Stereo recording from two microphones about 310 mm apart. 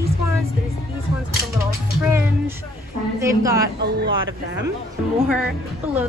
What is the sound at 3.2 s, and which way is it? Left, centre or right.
Speech, centre.